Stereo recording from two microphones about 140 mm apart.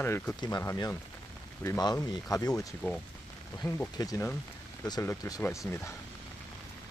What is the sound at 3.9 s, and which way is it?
Speech, 25° left (ahead or behind).